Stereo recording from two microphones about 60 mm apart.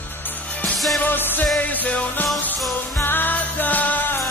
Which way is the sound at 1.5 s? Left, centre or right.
Left.